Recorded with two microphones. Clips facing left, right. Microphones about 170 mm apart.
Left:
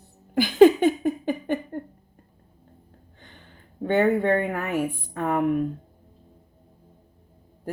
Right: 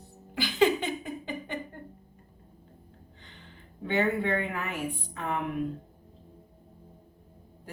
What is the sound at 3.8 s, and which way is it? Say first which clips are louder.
A woman's voice: left 7 dB; 50° left (ahead or behind).